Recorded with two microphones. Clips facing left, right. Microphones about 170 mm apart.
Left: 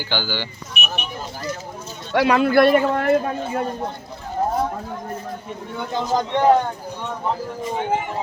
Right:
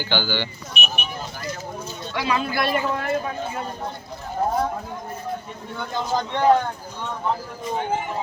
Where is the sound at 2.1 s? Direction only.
65° left (ahead or behind).